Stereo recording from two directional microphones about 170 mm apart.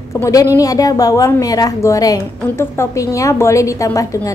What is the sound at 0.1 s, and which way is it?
A woman's voice, 20° left (ahead or behind).